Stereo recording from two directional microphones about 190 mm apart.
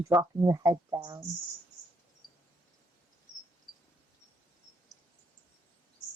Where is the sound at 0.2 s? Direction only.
20° right (ahead or behind).